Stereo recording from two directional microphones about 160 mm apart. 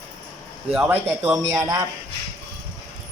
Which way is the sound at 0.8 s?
15° right (ahead or behind).